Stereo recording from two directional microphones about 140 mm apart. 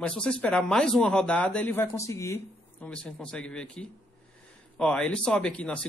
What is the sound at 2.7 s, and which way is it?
A man's voice, 10° left (ahead or behind).